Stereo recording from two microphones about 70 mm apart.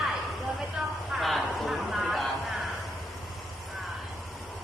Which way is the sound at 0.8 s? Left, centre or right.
Centre.